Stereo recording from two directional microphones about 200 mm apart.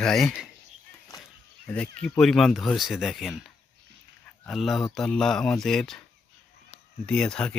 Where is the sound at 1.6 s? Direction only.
5° left (ahead or behind).